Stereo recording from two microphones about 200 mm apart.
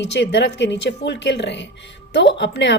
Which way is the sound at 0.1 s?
60° left (ahead or behind).